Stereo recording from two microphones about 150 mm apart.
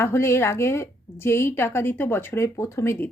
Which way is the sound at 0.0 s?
15° left (ahead or behind).